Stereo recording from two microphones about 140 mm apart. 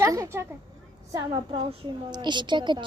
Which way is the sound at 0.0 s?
20° right (ahead or behind).